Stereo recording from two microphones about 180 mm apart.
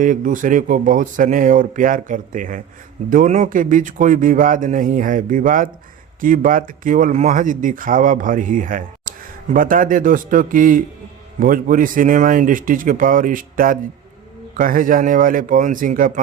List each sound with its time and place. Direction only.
0.0 s speech: 45° right (ahead or behind)